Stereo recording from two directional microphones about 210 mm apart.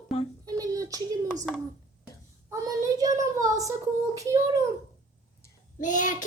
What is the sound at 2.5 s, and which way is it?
Child singing, 15° right (ahead or behind).